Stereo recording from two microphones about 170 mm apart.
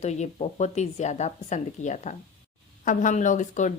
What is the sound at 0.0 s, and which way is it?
A woman's voice, 40° left (ahead or behind).